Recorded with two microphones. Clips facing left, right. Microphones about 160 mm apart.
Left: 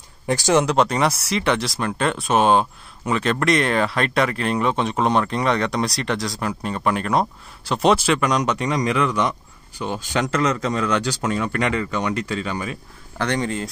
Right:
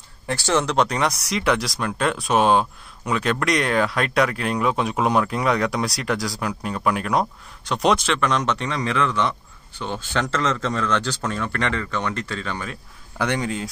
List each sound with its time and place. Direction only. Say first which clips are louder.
0.3 s speech: left 4 dB; 15° left (ahead or behind)
0.7 s speech: left 2 dB; 5° left (ahead or behind)
13.2 s speech: left 1 dB; 10° right (ahead or behind)